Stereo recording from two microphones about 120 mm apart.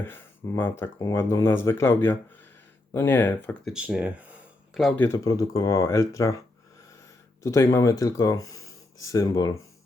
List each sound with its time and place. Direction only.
0.0 s speech: 20° left (ahead or behind)
0.9 s speech: 30° left (ahead or behind)
3.7 s speech: 5° right (ahead or behind)
5.1 s speech: 25° left (ahead or behind)
7.4 s speech: 25° left (ahead or behind)